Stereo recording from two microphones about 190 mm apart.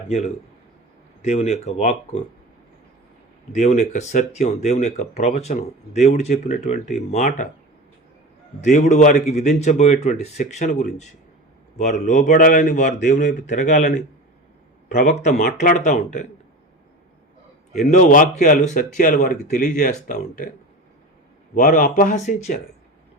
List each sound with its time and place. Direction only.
1.2 s speech: 35° left (ahead or behind)
3.5 s speech: 40° left (ahead or behind)
8.6 s speech: 35° left (ahead or behind)
15.0 s speech: 40° left (ahead or behind)
17.7 s speech: 40° left (ahead or behind)
21.5 s speech: 45° left (ahead or behind)